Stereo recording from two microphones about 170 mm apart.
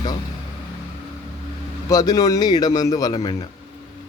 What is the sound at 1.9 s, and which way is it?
Speech, 20° left (ahead or behind).